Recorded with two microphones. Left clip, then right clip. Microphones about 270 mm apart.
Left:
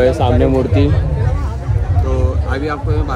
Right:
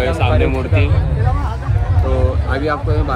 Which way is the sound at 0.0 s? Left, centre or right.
Left.